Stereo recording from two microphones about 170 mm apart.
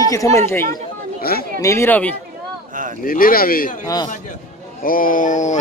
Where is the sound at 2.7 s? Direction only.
50° right (ahead or behind).